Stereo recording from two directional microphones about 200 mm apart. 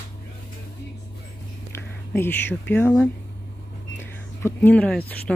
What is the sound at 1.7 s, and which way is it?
Speech, 10° left (ahead or behind).